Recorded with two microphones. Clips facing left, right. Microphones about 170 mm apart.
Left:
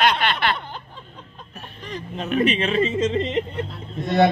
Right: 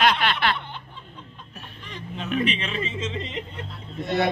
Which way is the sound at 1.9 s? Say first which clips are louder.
Left 3 dB; 45° left (ahead or behind).